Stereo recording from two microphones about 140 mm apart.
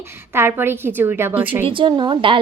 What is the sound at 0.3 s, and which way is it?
A woman's voice, 15° right (ahead or behind).